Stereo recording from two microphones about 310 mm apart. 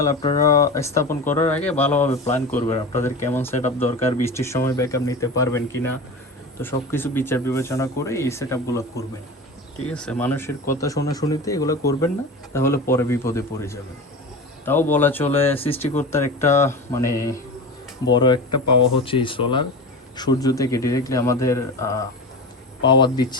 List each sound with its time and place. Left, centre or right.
0.0 s speech: centre
18.5 s speech: left
18.9 s speech: centre